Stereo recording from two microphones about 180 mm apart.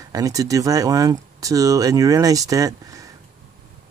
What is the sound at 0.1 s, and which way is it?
Speech, 20° right (ahead or behind).